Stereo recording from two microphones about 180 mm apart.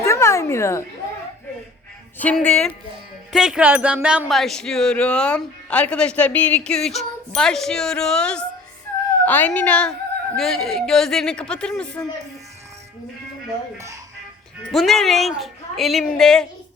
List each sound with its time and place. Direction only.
0.0 s a sound: 15° left (ahead or behind)
2.1 s speech: 10° left (ahead or behind)
3.3 s speech: 5° right (ahead or behind)
13.7 s music: 15° right (ahead or behind)
14.7 s speech: centre (ahead or behind)